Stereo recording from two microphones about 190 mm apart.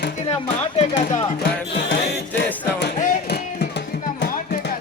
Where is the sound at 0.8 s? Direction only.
35° left (ahead or behind).